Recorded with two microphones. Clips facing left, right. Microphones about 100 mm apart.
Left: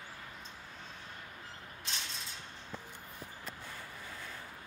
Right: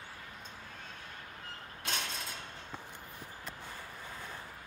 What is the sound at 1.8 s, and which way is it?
Mechanisms, 55° right (ahead or behind).